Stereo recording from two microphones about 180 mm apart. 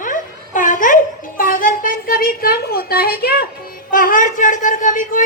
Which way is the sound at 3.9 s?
50° left (ahead or behind).